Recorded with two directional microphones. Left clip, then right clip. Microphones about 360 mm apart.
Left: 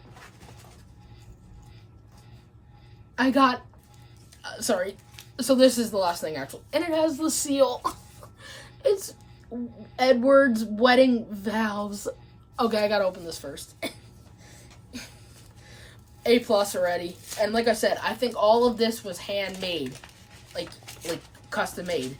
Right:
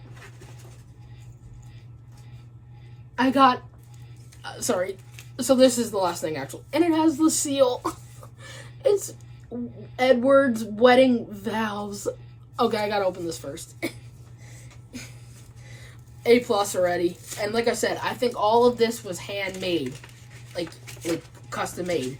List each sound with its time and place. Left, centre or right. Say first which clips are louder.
3.2 s a woman's voice: right 3 dB; centre
8.4 s gasp: even; centre
9.5 s a woman's voice: right 1 dB; centre
15.6 s a woman's voice: right 1 dB; centre